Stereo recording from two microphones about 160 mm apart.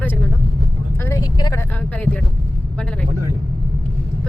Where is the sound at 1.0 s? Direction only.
20° left (ahead or behind).